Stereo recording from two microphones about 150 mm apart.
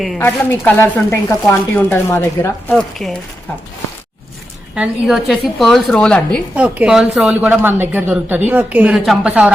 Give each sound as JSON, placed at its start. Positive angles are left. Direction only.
{"t": 0.2, "sound": "speech", "side_deg": 15}
{"t": 4.7, "sound": "a woman's voice", "side_deg": -5}
{"t": 6.6, "sound": "speech", "side_deg": -5}